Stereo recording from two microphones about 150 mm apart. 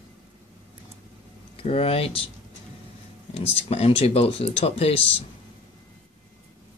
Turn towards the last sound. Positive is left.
turn(degrees=40)  # may be behind; listen again after turning